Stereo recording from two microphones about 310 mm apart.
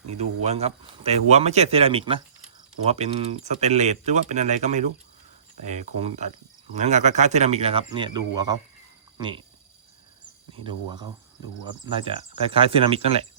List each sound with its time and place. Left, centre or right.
0.0 s a sound: right
0.4 s speech: right
10.7 s speech: centre